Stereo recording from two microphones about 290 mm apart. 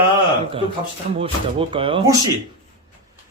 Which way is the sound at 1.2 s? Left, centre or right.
Centre.